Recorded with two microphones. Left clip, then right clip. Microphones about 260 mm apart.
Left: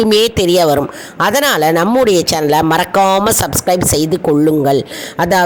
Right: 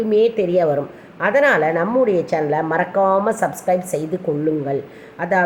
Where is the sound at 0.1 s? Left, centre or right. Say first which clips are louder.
Left 5 dB; left.